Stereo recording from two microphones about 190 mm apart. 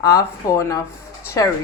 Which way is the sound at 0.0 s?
15° left (ahead or behind).